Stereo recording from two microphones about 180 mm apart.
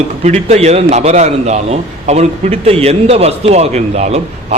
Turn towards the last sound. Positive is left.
turn(degrees=-40)  # may be behind; listen again after turning